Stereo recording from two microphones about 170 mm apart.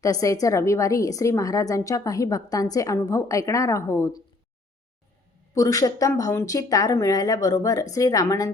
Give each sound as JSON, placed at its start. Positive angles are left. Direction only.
{"t": 0.0, "sound": "a woman's voice", "side_deg": 20}
{"t": 5.5, "sound": "a woman's voice", "side_deg": 20}